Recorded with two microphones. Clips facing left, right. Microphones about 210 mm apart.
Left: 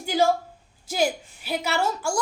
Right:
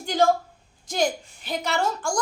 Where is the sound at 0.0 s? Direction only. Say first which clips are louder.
Even; 5° left (ahead or behind).